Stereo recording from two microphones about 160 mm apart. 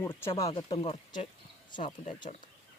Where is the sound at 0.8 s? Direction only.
40° left (ahead or behind).